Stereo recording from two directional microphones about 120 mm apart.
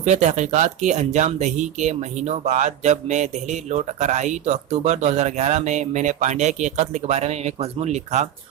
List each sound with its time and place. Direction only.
0.0 s speech: 75° right (ahead or behind)